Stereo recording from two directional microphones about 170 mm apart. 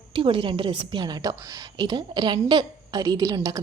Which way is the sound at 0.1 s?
30° right (ahead or behind).